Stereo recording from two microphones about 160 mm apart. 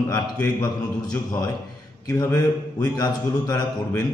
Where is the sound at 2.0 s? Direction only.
20° left (ahead or behind).